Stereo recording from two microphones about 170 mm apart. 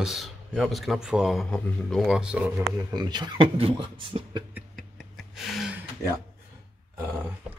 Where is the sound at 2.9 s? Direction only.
25° right (ahead or behind).